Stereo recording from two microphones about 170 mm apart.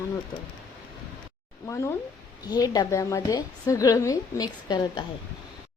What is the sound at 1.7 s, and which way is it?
A woman's voice, 15° left (ahead or behind).